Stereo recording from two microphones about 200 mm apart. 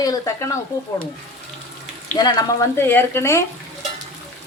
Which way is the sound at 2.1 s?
20° left (ahead or behind).